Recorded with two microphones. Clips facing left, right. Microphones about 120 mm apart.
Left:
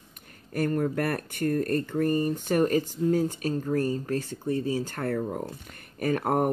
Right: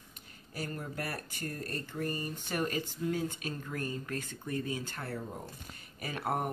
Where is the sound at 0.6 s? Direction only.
60° left (ahead or behind); by 4.9 s 35° left (ahead or behind).